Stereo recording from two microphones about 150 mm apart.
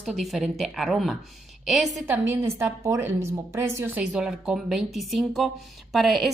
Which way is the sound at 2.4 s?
15° right (ahead or behind).